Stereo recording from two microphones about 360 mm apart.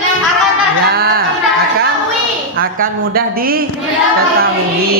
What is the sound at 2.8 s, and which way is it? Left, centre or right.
Speech, right.